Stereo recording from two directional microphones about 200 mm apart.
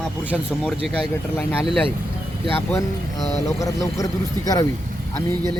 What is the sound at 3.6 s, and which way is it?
A man's voice, 15° left (ahead or behind).